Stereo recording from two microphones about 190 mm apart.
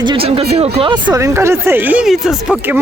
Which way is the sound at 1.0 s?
15° right (ahead or behind).